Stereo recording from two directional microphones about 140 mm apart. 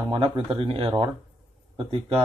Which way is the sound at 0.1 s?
40° right (ahead or behind).